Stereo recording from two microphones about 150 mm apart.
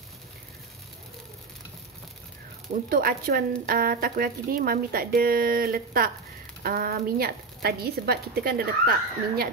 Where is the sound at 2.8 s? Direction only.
80° right.